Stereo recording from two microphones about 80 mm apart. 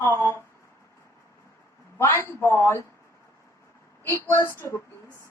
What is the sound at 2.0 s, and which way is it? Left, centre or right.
Speech, left.